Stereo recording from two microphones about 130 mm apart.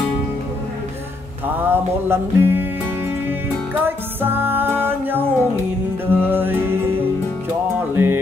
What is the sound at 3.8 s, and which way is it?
Music, 15° right (ahead or behind).